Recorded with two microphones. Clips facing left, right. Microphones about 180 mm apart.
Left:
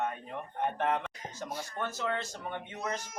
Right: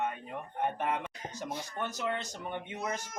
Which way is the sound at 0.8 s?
10° right (ahead or behind).